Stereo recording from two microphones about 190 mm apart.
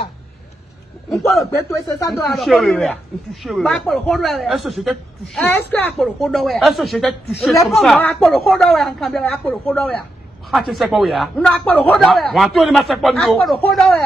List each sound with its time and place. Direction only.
1.4 s speech: 15° left (ahead or behind)
2.2 s a woman's voice: centre (ahead or behind)